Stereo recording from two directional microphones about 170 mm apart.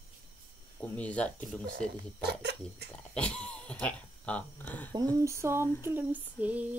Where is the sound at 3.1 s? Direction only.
5° left (ahead or behind).